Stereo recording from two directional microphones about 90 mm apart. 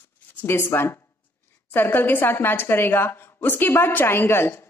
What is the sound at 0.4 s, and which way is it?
A woman's voice, 25° left (ahead or behind).